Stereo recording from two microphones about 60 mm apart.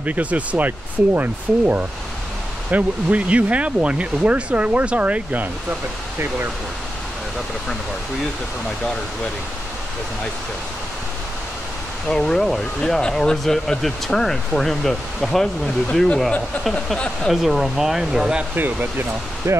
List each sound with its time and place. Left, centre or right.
0.0 s speech: right
12.1 s speech: centre
17.3 s speech: centre
18.5 s speech: right